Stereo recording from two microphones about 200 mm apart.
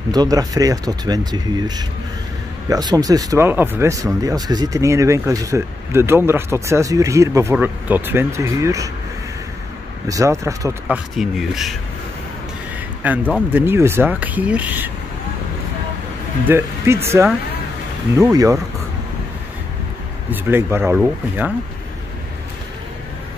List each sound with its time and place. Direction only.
0.1 s speech: 20° right (ahead or behind)
10.0 s speech: 15° right (ahead or behind)
11.1 s speech: centre (ahead or behind)
13.0 s speech: 5° right (ahead or behind)
16.4 s speech: 10° right (ahead or behind)
20.2 s speech: 10° right (ahead or behind)